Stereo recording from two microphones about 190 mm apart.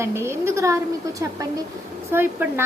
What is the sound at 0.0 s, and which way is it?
Speech, 15° right (ahead or behind).